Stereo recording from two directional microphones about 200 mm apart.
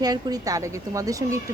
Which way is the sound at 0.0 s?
20° right (ahead or behind).